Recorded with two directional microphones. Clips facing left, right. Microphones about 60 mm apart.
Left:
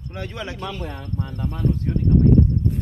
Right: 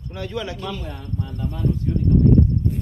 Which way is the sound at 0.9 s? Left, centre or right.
Left.